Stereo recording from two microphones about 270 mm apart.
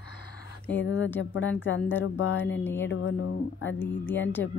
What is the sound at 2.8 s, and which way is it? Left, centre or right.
Speech, left.